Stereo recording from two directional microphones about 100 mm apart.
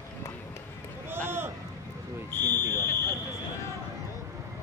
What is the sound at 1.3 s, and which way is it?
Run, 25° right (ahead or behind).